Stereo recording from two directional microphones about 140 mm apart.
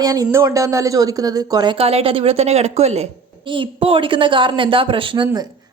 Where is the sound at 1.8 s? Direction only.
45° right (ahead or behind).